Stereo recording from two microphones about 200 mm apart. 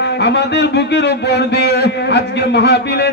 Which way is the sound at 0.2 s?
60° left (ahead or behind).